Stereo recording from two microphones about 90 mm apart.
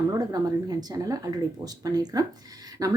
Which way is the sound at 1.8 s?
45° right (ahead or behind).